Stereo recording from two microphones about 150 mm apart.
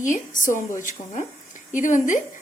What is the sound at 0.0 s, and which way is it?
A woman's voice, 60° left (ahead or behind).